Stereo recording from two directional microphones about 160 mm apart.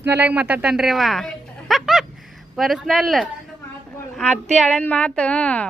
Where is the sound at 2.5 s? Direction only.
Centre (ahead or behind).